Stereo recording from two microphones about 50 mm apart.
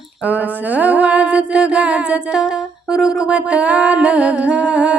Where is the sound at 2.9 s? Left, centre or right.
Centre.